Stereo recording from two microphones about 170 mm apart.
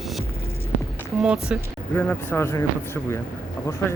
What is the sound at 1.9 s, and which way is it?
Speech, 10° left (ahead or behind).